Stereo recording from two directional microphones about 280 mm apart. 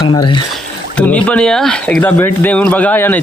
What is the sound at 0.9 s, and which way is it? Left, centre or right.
Speech, centre.